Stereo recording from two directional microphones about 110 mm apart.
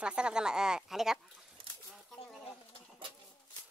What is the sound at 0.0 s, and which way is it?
Speech, 10° right (ahead or behind).